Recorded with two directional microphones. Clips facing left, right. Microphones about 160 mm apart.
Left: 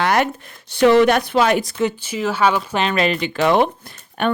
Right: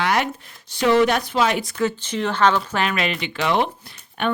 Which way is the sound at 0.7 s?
65° left (ahead or behind).